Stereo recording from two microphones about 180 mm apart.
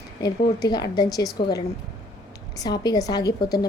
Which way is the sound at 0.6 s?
20° left (ahead or behind).